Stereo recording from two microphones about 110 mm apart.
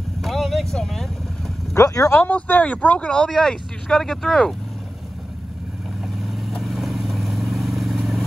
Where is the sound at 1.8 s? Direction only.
25° left (ahead or behind).